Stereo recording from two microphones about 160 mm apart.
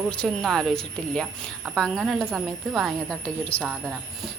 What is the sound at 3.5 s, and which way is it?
Speech, 35° left (ahead or behind).